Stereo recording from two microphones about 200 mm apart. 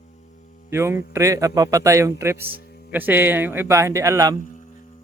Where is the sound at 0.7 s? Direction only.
15° right (ahead or behind).